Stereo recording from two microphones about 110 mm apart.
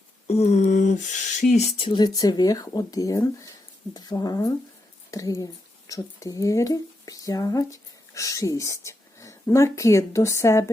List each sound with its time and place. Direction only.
0.3 s a sound: 80° left
1.4 s speech: 90° left
1.8 s speech: 45° left (ahead or behind); by 10.7 s 25° left (ahead or behind)